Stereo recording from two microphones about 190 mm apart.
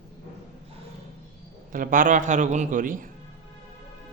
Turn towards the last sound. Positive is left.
turn(degrees=-45)  # may be behind; listen again after turning